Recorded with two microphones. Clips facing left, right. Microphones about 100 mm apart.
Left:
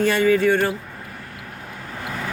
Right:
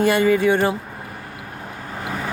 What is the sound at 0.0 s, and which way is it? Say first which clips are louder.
Speech: right 1 dB; 10° right (ahead or behind).